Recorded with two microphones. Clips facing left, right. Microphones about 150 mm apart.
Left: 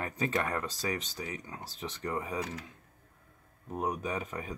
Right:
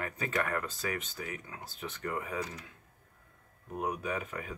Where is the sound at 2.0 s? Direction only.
25° left (ahead or behind).